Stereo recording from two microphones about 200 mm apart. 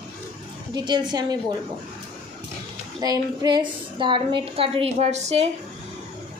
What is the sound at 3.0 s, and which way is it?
A woman's voice, 20° right (ahead or behind).